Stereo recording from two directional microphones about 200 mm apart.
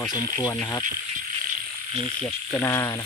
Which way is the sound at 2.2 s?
15° left (ahead or behind).